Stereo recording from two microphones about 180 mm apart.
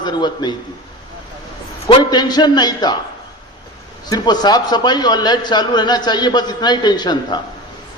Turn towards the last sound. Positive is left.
turn(degrees=25)  # may be behind; listen again after turning